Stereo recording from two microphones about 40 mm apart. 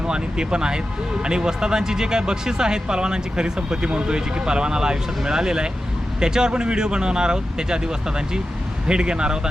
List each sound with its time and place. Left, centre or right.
0.1 s speech: right
8.9 s speech: right